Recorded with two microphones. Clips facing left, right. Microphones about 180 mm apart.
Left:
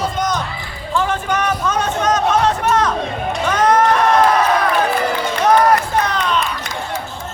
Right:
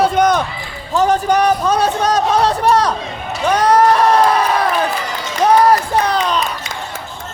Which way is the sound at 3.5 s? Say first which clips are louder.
Right 2 dB; 35° right (ahead or behind).